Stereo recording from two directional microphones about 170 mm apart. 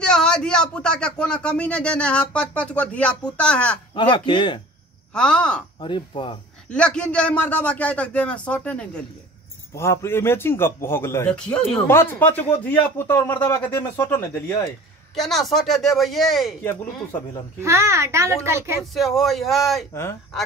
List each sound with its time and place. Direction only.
0.0 s a man's voice: 5° left (ahead or behind)
3.9 s speech: 25° left (ahead or behind)
5.1 s speech: 5° left (ahead or behind)
5.8 s speech: 30° left (ahead or behind)
6.7 s a man's voice: 5° left (ahead or behind)
15.1 s speech: centre (ahead or behind)
17.6 s a child's voice: 15° right (ahead or behind)
18.8 s speech: centre (ahead or behind)
19.9 s a man's voice: 15° left (ahead or behind)